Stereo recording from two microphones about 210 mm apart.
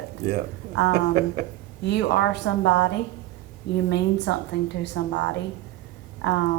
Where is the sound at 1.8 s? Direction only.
55° left (ahead or behind).